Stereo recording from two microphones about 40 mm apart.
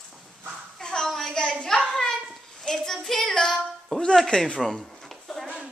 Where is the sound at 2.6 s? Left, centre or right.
Centre.